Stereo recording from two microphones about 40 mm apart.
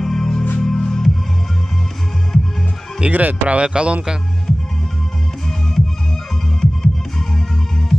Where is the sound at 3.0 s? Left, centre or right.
Right.